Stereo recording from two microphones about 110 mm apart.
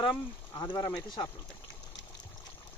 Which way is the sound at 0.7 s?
40° left (ahead or behind).